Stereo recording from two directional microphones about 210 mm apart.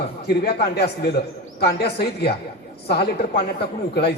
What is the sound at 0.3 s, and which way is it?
A man's voice, 50° left (ahead or behind).